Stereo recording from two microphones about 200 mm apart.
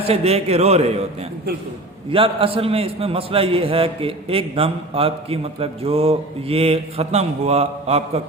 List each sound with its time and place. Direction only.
0.1 s a man's voice: 30° right (ahead or behind)
2.1 s a man's voice: 25° right (ahead or behind)